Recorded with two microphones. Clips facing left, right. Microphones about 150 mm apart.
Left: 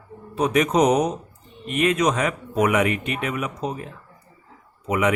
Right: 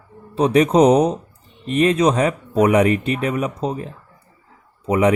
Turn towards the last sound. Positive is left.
turn(degrees=-35)  # may be behind; listen again after turning